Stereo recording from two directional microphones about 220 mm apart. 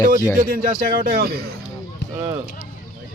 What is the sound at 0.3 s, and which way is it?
A man's voice, 40° right (ahead or behind).